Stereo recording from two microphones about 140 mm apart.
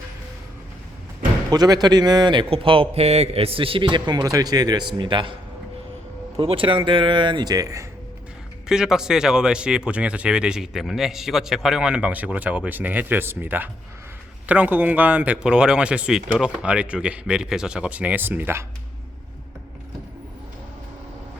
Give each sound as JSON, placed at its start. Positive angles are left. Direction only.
{"t": 1.5, "sound": "a man's voice", "side_deg": -25}
{"t": 6.4, "sound": "a man's voice", "side_deg": -40}
{"t": 8.6, "sound": "speech", "side_deg": -5}